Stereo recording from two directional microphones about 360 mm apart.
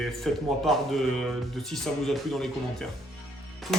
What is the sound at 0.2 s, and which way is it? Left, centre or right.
Speech, centre.